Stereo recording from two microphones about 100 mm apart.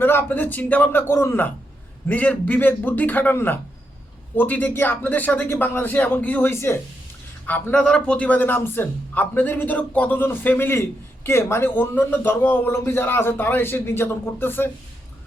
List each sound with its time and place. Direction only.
0.0 s a man's voice: 20° left (ahead or behind)
7.4 s speech: 15° left (ahead or behind)